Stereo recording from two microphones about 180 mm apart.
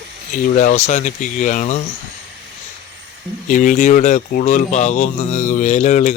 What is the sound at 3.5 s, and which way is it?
Speech, 45° left (ahead or behind).